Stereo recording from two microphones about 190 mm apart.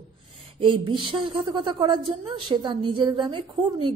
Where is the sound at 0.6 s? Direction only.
25° right (ahead or behind).